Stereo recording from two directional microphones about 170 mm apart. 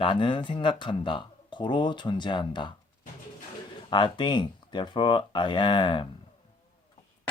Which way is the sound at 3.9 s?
25° left (ahead or behind).